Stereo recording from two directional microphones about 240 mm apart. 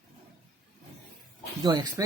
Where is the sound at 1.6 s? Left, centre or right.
Centre.